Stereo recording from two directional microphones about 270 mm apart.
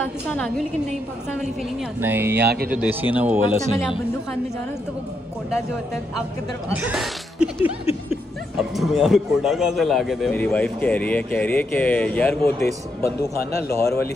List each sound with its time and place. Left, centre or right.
0.0 s a woman's voice: centre
2.0 s speech: centre
2.4 s speech: right
2.7 s speech: centre
6.7 s a man's voice: centre